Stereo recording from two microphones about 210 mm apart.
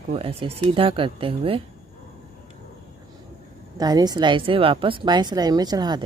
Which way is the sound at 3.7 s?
20° right (ahead or behind).